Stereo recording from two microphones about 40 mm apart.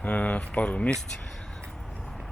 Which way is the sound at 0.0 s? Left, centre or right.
Left.